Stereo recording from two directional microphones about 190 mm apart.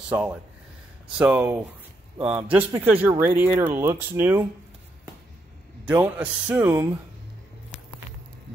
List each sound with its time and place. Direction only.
1.1 s speech: 5° right (ahead or behind)
5.9 s speech: 10° right (ahead or behind)